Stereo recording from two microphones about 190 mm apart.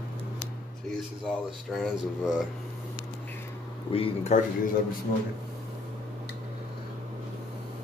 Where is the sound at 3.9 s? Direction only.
30° left (ahead or behind).